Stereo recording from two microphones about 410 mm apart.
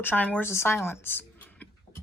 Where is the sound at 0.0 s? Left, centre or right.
Centre.